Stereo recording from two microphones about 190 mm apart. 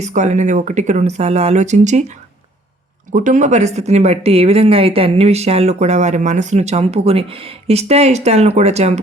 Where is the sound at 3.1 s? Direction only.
45° right (ahead or behind).